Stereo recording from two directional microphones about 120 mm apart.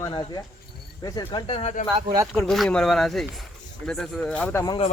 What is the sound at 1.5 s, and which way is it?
Speech, 55° left (ahead or behind).